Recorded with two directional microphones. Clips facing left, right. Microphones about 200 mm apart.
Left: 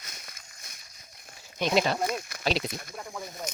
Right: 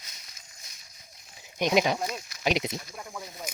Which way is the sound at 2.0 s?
55° left (ahead or behind).